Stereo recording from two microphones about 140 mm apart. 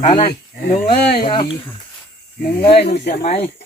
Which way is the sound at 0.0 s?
45° left (ahead or behind).